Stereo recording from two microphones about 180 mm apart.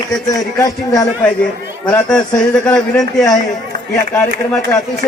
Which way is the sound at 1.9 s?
5° left (ahead or behind).